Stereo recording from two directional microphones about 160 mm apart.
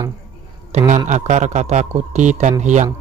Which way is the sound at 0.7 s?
50° right (ahead or behind).